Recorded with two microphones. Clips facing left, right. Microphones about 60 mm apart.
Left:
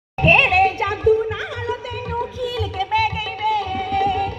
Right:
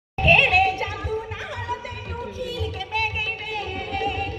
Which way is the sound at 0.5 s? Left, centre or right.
Left.